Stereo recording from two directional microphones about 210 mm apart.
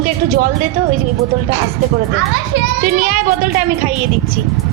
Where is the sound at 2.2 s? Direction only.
65° right (ahead or behind).